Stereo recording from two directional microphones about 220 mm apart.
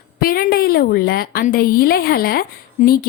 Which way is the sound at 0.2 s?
40° left (ahead or behind).